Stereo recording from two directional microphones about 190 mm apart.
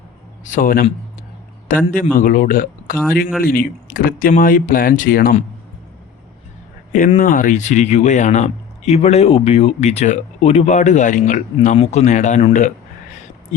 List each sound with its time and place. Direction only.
0.4 s a man's voice: 45° left (ahead or behind)
6.9 s speech: 45° left (ahead or behind)